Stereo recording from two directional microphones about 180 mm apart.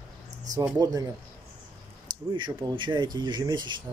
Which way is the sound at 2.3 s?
25° right (ahead or behind).